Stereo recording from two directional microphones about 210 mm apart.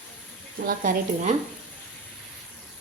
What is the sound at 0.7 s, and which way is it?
Speech, 40° right (ahead or behind).